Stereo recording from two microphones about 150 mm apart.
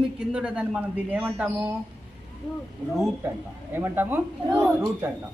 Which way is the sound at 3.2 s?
15° right (ahead or behind).